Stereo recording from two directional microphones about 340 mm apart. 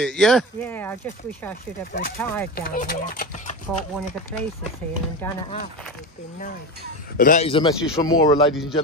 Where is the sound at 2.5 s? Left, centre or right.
Left.